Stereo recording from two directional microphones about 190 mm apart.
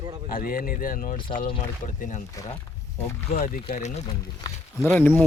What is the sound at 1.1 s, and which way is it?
Speech, 25° left (ahead or behind).